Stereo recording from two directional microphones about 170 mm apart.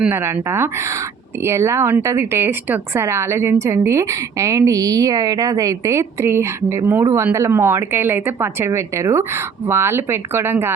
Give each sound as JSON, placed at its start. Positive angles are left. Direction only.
{"t": 0.0, "sound": "a woman's voice", "side_deg": -15}